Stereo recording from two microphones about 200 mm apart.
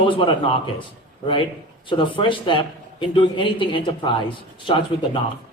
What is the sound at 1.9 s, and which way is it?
Speech, 25° left (ahead or behind).